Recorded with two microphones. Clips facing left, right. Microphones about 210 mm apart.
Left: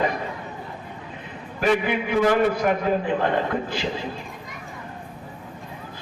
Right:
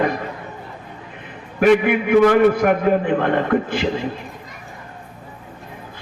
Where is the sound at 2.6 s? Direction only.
60° right (ahead or behind).